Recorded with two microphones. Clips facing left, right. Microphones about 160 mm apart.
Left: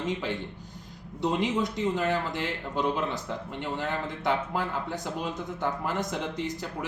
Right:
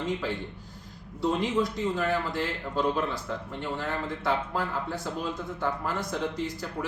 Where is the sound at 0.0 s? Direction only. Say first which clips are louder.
Even; 20° left (ahead or behind).